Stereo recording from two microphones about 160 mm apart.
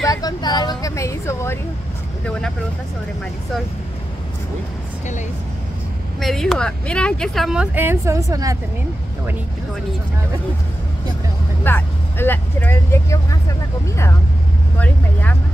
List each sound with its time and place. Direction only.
0.0 s a woman's voice: 25° left (ahead or behind)
6.1 s speech: centre (ahead or behind); by 8.5 s 20° right (ahead or behind)
11.6 s speech: 10° left (ahead or behind)